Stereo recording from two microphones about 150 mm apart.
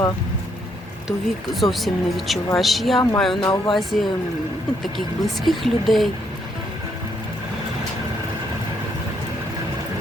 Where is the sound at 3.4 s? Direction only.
30° left (ahead or behind).